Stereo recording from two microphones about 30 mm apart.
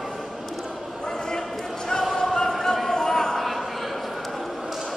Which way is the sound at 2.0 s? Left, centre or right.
Centre.